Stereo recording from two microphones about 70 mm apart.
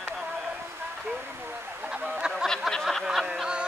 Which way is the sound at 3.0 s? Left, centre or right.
Centre.